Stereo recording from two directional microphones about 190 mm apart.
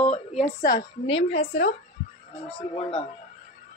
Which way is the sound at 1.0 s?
30° left (ahead or behind).